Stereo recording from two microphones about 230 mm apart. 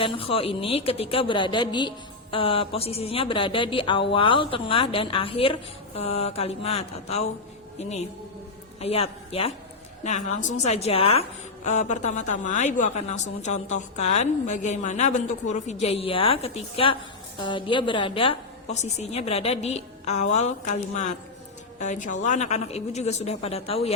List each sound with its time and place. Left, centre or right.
0.0 s a man's voice: left